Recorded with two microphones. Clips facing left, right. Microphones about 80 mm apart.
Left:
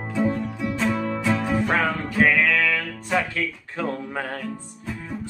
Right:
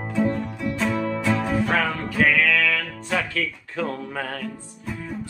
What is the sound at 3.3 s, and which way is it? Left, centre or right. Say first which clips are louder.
Speech: right 1 dB; left.